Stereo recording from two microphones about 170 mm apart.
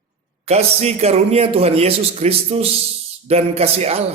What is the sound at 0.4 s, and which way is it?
A man's voice, 40° right (ahead or behind).